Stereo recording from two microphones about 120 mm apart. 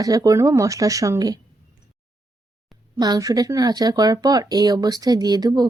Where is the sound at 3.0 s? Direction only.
30° right (ahead or behind).